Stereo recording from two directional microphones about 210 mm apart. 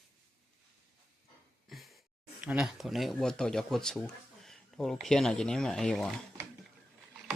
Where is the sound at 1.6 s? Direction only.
Centre (ahead or behind).